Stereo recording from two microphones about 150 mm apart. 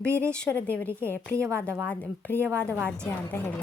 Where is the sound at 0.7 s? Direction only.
10° left (ahead or behind).